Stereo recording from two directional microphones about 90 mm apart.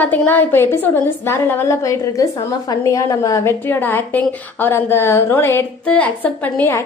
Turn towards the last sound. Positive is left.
turn(degrees=20)  # may be behind; listen again after turning